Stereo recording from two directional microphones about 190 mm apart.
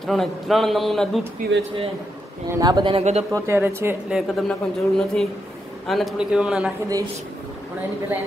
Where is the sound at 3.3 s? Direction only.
15° right (ahead or behind).